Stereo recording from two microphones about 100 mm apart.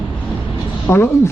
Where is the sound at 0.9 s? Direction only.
25° left (ahead or behind).